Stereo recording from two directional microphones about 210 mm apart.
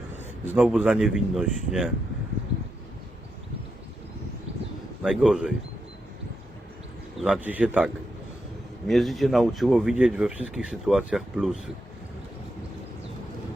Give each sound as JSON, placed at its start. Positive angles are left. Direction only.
{"t": 0.4, "sound": "speech", "side_deg": -5}
{"t": 5.0, "sound": "speech", "side_deg": 0}
{"t": 7.2, "sound": "speech", "side_deg": -5}
{"t": 8.9, "sound": "speech", "side_deg": 0}